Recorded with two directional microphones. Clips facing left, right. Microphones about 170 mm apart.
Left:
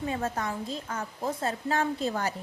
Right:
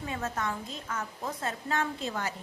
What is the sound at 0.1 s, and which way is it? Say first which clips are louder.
A woman's voice: right 1 dB; 35° left (ahead or behind).